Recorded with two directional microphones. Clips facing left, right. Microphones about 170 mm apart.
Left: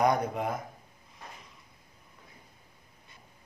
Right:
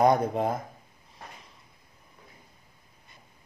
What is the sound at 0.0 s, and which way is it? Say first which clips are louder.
Speech: right 4 dB; 30° right (ahead or behind).